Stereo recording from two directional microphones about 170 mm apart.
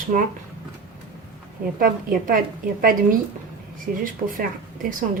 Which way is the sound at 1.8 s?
55° right (ahead or behind).